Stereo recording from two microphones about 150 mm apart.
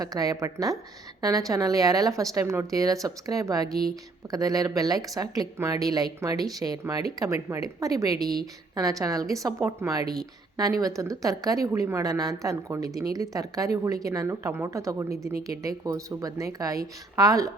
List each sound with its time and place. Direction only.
0.0 s speech: 25° right (ahead or behind)